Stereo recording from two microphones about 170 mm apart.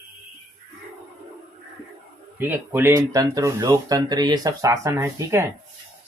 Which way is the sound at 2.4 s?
10° right (ahead or behind).